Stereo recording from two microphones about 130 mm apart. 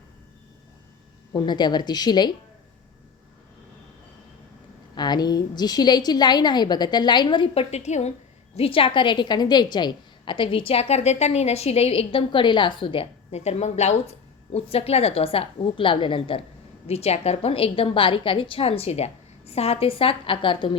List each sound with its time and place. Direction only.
1.3 s a woman's voice: 35° left (ahead or behind)
4.9 s a woman's voice: 35° left (ahead or behind); by 8.1 s 60° left (ahead or behind)
8.5 s a woman's voice: 45° left (ahead or behind)
16.8 s a woman's voice: 50° left (ahead or behind)